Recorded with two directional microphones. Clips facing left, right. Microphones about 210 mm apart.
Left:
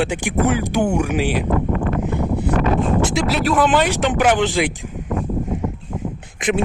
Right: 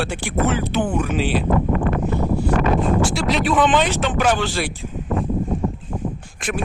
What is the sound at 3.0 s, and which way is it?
Speech, 15° left (ahead or behind).